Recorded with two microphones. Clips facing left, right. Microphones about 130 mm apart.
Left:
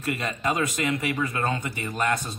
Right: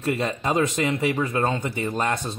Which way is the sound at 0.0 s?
30° right (ahead or behind).